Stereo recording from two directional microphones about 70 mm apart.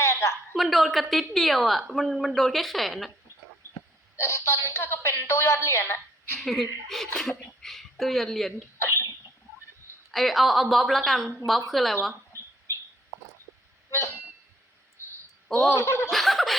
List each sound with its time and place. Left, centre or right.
0.0 s a sound: left
0.5 s a woman's voice: centre
4.2 s a woman's voice: left
6.4 s a woman's voice: centre
8.8 s cough: left
10.1 s a woman's voice: centre
15.7 s a woman's voice: left
16.0 s a woman's voice: centre